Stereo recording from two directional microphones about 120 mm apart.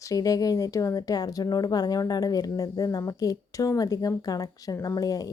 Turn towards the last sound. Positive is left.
turn(degrees=30)  # may be behind; listen again after turning